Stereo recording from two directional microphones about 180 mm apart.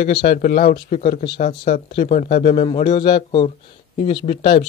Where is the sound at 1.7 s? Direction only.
45° left (ahead or behind).